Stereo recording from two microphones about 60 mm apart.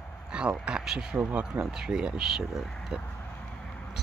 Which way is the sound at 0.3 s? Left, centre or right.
Centre.